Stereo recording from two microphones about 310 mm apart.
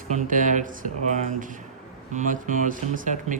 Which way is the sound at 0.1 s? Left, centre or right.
Right.